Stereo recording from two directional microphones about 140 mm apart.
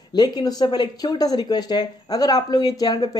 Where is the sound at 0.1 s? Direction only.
30° left (ahead or behind).